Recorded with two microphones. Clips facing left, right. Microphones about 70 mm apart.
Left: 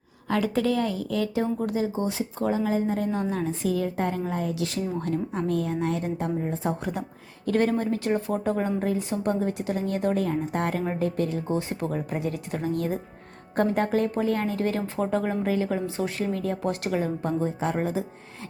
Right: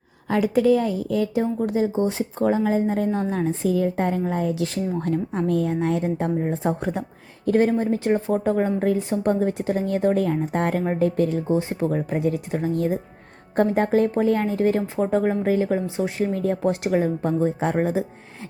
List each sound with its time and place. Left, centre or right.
0.3 s a woman's voice: centre
1.6 s a woman's voice: right
11.4 s a woman's voice: right
17.0 s speech: right